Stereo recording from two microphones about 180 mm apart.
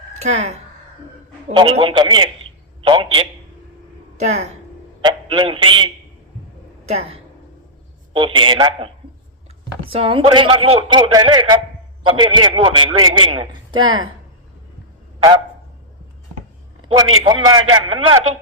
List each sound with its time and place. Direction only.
0.1 s speech: 40° right (ahead or behind)
1.5 s a man's voice: 30° right (ahead or behind)
5.0 s a man's voice: 30° right (ahead or behind)
9.9 s a man's voice: 30° right (ahead or behind)
17.0 s a man's voice: 25° right (ahead or behind)